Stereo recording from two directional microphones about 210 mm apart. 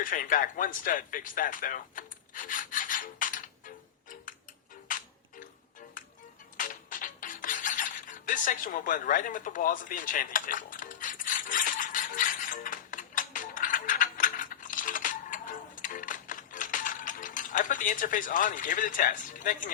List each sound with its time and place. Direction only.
0.0 s speech: 40° left (ahead or behind)
4.9 s tick-tock: 40° left (ahead or behind)
6.6 s a sound: 40° left (ahead or behind)